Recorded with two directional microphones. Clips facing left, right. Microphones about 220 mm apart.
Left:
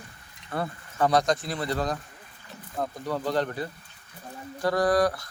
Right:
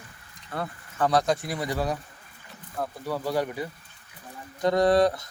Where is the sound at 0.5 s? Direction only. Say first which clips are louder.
Left 2 dB; 5° left (ahead or behind); by 3.7 s 10° right (ahead or behind).